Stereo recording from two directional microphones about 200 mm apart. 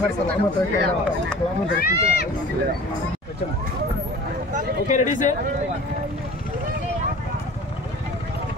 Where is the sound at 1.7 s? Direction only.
50° left (ahead or behind).